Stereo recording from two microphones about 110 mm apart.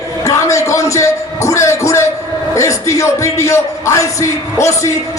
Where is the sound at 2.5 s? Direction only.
30° left (ahead or behind).